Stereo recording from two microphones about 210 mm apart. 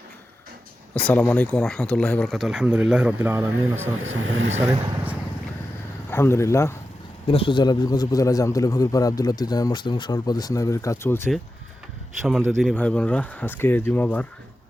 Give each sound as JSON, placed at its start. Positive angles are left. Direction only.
{"t": 0.9, "sound": "speech", "side_deg": 5}
{"t": 4.0, "sound": "speech", "side_deg": -70}
{"t": 6.1, "sound": "a man's voice", "side_deg": 10}
{"t": 7.3, "sound": "a man's voice", "side_deg": 25}
{"t": 12.2, "sound": "a man's voice", "side_deg": 0}